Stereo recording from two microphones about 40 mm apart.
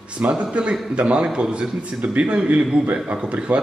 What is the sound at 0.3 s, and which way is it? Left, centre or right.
A man's voice, right.